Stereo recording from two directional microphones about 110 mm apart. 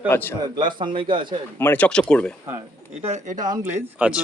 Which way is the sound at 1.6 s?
15° left (ahead or behind).